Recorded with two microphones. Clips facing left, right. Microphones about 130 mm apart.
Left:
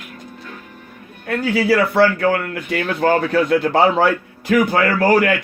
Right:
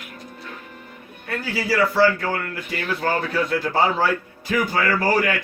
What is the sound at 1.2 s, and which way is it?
Speech, 60° left (ahead or behind).